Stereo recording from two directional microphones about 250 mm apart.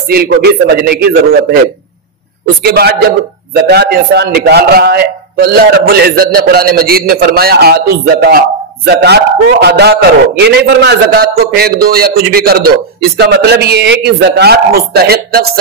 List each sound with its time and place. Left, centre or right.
0.1 s a man's voice: right
2.6 s a man's voice: right